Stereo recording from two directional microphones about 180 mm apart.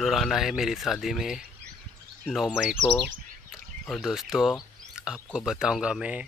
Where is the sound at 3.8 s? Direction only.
Centre (ahead or behind).